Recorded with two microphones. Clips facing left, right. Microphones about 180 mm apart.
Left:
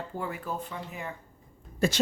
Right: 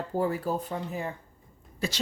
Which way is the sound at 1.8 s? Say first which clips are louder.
Left 6 dB; 50° left (ahead or behind).